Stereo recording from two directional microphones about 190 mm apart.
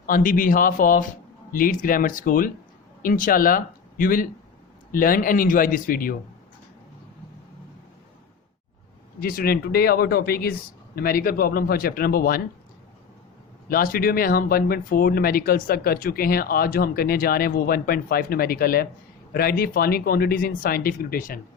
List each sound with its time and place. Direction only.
0.0 s speech: 45° left (ahead or behind)
9.2 s speech: 50° left (ahead or behind)
13.7 s speech: 50° left (ahead or behind)